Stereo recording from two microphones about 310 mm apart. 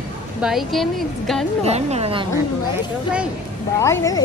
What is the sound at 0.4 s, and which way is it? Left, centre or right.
A woman's voice, centre.